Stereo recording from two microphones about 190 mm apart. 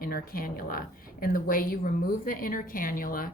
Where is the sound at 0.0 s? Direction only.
50° left (ahead or behind).